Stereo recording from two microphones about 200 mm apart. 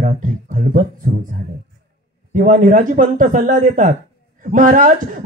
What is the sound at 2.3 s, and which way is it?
Speech, 40° right (ahead or behind).